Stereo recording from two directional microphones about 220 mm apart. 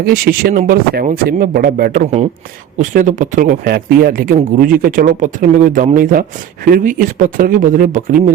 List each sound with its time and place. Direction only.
0.0 s speech: 45° right (ahead or behind)